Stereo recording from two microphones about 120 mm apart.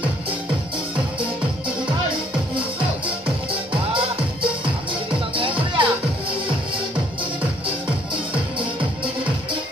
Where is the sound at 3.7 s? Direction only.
50° right (ahead or behind).